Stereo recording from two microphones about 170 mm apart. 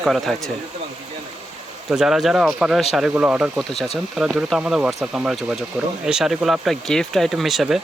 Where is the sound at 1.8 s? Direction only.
5° right (ahead or behind).